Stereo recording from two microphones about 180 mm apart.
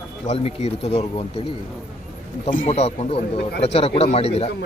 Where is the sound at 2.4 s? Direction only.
40° left (ahead or behind).